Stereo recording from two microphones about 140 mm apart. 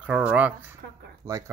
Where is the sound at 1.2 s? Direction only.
20° right (ahead or behind).